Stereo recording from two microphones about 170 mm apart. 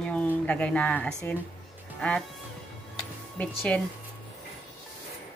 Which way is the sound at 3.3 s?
10° left (ahead or behind).